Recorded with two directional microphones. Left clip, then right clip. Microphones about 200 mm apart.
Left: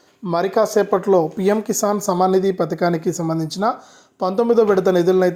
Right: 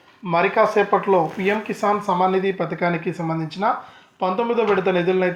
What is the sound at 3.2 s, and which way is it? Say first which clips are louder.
Speech: left 3 dB; 45° left (ahead or behind).